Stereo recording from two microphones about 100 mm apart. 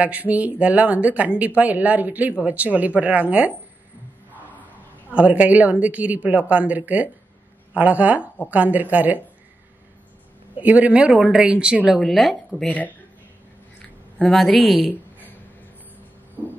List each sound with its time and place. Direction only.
0.0 s speech: 15° right (ahead or behind)
5.1 s speech: 15° right (ahead or behind)
10.5 s a woman's voice: 15° right (ahead or behind); by 12.6 s centre (ahead or behind)
12.6 s speech: 15° left (ahead or behind)
14.1 s a woman's voice: 5° left (ahead or behind)
14.9 s a sound: 15° left (ahead or behind)
16.4 s heart murmur: 20° right (ahead or behind)